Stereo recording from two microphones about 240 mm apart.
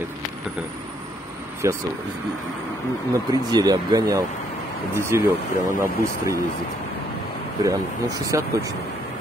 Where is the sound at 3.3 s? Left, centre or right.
Centre.